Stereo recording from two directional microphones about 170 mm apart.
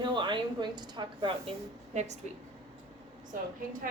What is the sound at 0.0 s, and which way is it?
A woman's voice, 25° right (ahead or behind).